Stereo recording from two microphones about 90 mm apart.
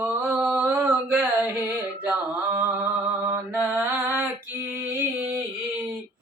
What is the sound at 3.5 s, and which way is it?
Music, 20° right (ahead or behind).